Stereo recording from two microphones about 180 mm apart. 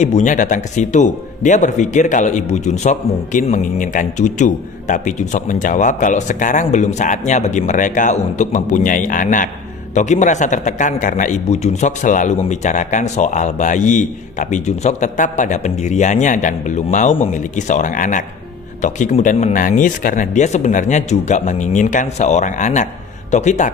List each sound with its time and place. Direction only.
0.0 s a man's voice: 40° left (ahead or behind)